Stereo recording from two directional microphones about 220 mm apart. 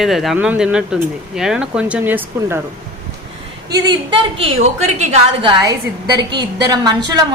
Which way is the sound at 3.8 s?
25° right (ahead or behind).